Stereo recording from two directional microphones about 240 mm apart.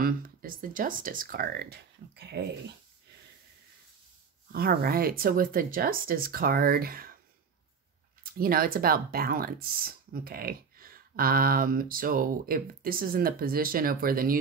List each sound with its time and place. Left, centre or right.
0.0 s speech: right
4.5 s speech: right
8.2 s speech: right